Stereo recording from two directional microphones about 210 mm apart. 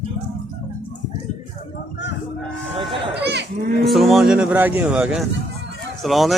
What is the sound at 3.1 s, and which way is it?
Livestock, 55° right (ahead or behind).